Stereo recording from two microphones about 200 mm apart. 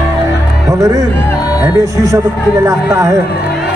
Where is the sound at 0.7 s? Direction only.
15° right (ahead or behind).